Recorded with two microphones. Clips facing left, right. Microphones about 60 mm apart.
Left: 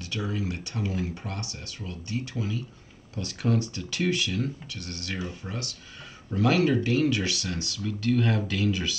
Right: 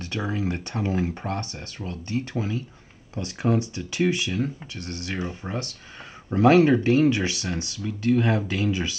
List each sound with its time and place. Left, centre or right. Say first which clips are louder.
0.0 s speech: right 4 dB; right